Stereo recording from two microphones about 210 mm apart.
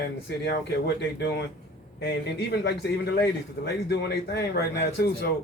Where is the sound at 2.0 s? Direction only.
55° left (ahead or behind).